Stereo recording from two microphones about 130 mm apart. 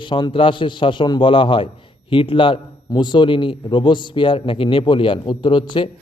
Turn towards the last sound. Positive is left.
turn(degrees=40)  # may be behind; listen again after turning